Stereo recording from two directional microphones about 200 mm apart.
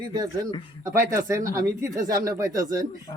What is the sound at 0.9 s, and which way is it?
A man's voice, 15° right (ahead or behind).